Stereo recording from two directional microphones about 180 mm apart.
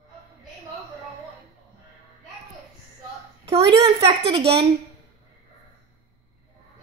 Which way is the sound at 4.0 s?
30° right (ahead or behind).